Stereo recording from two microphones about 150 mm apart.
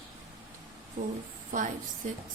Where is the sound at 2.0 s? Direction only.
55° right (ahead or behind).